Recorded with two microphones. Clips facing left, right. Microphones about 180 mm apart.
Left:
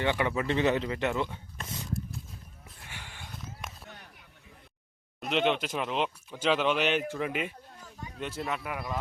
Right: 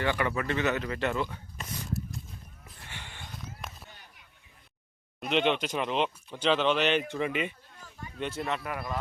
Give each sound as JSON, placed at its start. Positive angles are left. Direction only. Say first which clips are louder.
{"t": 0.0, "sound": "speech", "louder": "left 1 dB", "side_deg": 20}
{"t": 2.6, "sound": "a sound", "louder": "right 1 dB", "side_deg": 5}
{"t": 5.2, "sound": "speech", "louder": "right 1 dB", "side_deg": 0}